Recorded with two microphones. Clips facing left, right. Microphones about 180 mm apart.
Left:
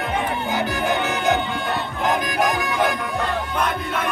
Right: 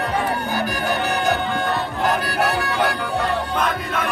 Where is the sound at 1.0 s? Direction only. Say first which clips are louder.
Right 1 dB; 35° right (ahead or behind).